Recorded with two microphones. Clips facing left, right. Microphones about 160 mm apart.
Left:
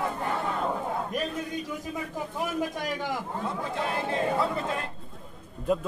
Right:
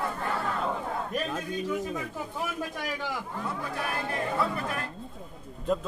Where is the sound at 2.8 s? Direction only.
15° left (ahead or behind).